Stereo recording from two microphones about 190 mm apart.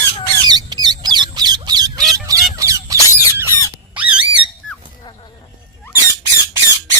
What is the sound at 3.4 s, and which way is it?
Squeak, 10° right (ahead or behind).